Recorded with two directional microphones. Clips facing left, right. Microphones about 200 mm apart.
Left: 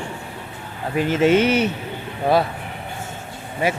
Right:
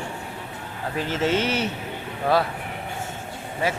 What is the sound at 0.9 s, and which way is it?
Speech, 15° left (ahead or behind).